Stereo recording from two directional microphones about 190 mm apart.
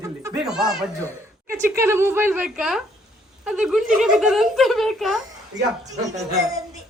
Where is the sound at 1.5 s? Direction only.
15° right (ahead or behind).